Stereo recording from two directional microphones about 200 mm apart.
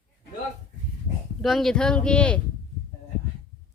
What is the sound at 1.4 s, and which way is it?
Speech, centre (ahead or behind).